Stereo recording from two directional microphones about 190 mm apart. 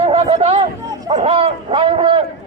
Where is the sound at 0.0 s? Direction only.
35° right (ahead or behind).